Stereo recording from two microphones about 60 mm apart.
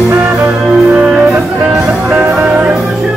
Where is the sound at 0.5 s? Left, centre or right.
Right.